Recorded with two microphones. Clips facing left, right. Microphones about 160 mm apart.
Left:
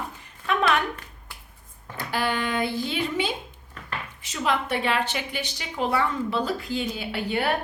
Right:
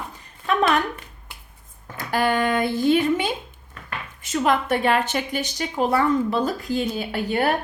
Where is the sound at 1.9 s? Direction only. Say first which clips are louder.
Right 5 dB; 45° right (ahead or behind).